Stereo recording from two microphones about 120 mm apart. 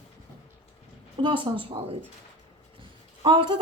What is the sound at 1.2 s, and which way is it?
Speech, 45° right (ahead or behind).